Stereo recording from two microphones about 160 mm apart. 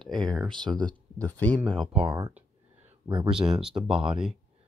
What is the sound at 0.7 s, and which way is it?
Speech, 25° right (ahead or behind).